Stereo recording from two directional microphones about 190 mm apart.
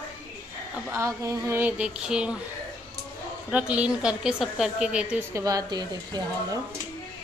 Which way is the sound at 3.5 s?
5° right (ahead or behind).